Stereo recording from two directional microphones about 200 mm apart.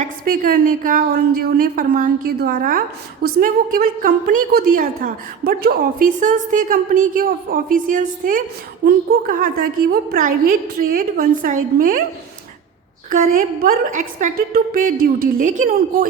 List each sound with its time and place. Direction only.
0.0 s a woman's voice: 45° right (ahead or behind)
13.1 s a woman's voice: 45° right (ahead or behind)